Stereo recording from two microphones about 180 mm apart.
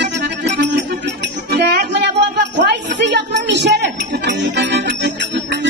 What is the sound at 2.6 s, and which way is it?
Music, 75° right (ahead or behind).